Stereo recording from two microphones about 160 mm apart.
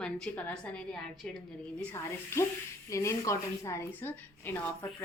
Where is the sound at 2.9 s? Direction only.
20° left (ahead or behind).